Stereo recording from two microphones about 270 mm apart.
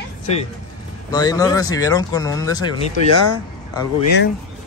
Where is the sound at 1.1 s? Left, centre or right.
Centre.